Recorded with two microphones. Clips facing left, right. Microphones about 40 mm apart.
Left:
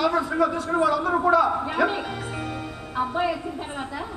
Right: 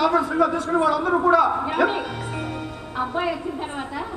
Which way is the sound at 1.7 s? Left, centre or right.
Right.